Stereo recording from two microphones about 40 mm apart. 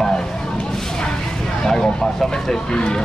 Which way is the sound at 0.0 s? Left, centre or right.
Centre.